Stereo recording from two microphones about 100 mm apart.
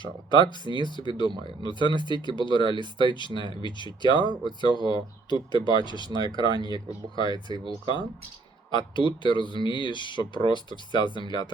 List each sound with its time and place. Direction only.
0.0 s speech: 50° left (ahead or behind)
6.1 s speech: 45° right (ahead or behind)
6.3 s speech: 55° left (ahead or behind)
6.6 s speech: 40° right (ahead or behind)
7.6 s speech: 50° left (ahead or behind)